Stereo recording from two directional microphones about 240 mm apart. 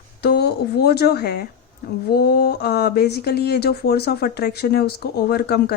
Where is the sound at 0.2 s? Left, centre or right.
Left.